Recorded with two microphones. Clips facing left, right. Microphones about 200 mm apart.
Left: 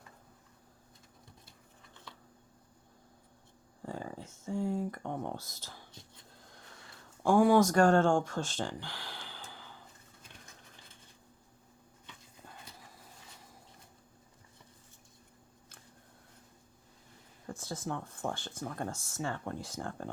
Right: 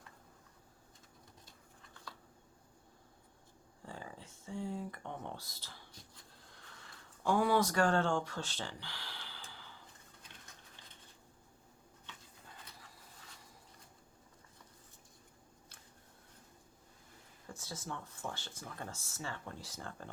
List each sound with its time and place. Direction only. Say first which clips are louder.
3.8 s speech: left 8 dB; 45° left (ahead or behind)
7.2 s speech: left 7 dB; 45° left (ahead or behind)
17.4 s speech: left 7 dB; 55° left (ahead or behind)